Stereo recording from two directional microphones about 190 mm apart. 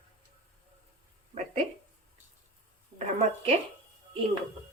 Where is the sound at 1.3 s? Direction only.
35° right (ahead or behind).